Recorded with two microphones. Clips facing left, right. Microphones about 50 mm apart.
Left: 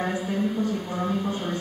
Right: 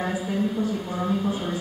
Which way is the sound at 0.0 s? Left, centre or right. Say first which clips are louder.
Even; centre.